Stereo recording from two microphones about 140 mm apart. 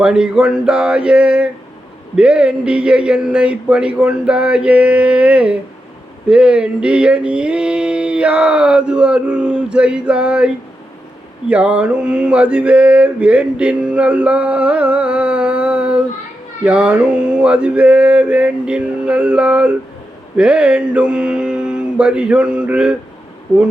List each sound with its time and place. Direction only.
0.0 s mantra: 5° right (ahead or behind)